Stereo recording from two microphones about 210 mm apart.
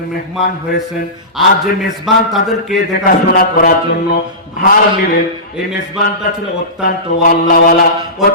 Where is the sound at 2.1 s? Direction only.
Centre (ahead or behind).